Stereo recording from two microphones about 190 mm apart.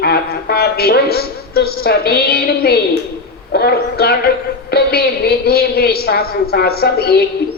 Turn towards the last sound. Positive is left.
turn(degrees=55)  # may be behind; listen again after turning